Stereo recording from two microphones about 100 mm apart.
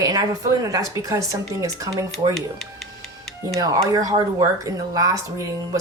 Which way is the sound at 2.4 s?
5° left (ahead or behind).